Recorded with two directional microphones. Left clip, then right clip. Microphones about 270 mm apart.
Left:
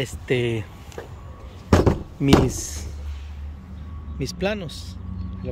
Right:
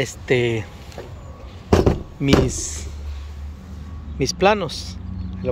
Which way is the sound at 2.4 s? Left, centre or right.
Centre.